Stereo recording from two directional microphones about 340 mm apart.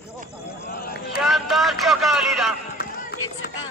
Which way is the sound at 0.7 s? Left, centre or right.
Left.